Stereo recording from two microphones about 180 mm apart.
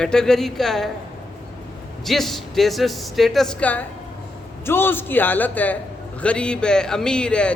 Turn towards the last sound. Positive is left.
turn(degrees=5)  # may be behind; listen again after turning